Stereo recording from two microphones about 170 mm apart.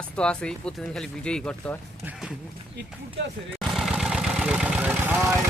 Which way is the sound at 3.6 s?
Centre (ahead or behind).